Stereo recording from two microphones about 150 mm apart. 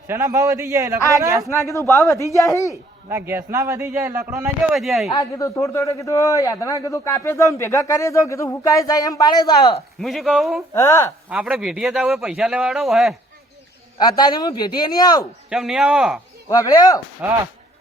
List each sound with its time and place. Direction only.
0.1 s a man's voice: 20° right (ahead or behind)
1.5 s a man's voice: 20° left (ahead or behind)
3.1 s a man's voice: 15° right (ahead or behind)
4.7 s a man's voice: centre (ahead or behind)
5.1 s a man's voice: 20° left (ahead or behind)
10.0 s a man's voice: centre (ahead or behind)
10.8 s speech: 15° left (ahead or behind)
11.3 s a man's voice: 10° right (ahead or behind)
14.0 s a man's voice: 25° left (ahead or behind)
15.4 s a man's voice: 5° right (ahead or behind)
16.5 s a man's voice: 25° left (ahead or behind)
17.2 s speech: 10° right (ahead or behind)